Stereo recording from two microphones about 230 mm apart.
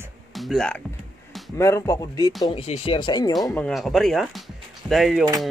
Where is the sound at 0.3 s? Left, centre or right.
Centre.